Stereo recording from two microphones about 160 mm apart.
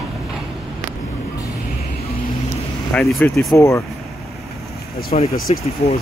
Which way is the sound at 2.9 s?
5° left (ahead or behind).